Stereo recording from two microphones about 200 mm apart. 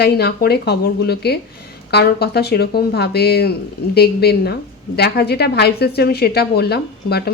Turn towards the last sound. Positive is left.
turn(degrees=55)  # may be behind; listen again after turning